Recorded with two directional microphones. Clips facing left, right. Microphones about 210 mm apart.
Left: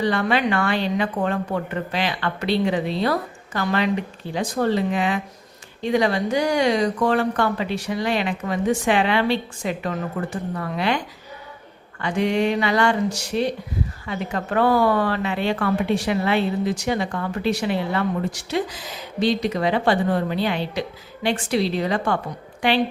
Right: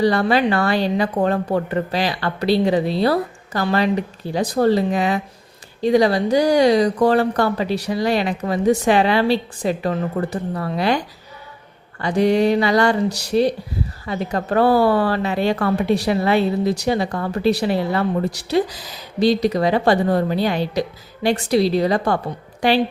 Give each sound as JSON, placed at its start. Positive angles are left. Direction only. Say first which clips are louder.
{"t": 0.0, "sound": "a woman's voice", "louder": "right 4 dB", "side_deg": -35}